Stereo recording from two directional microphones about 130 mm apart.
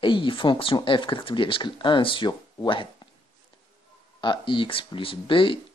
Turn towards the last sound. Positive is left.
turn(degrees=40)  # may be behind; listen again after turning